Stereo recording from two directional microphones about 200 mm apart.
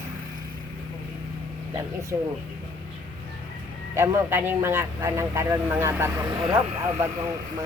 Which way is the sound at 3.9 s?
10° right (ahead or behind).